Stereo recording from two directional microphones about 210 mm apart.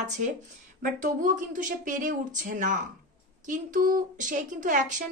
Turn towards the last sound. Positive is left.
turn(degrees=-35)  # may be behind; listen again after turning